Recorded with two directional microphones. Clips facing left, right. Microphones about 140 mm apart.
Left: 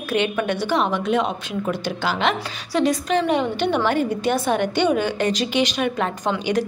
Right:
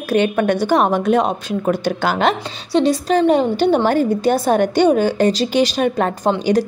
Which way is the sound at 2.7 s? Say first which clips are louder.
Right 5 dB; 30° right (ahead or behind).